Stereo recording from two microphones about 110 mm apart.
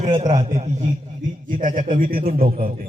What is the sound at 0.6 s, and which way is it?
Speech, 85° right.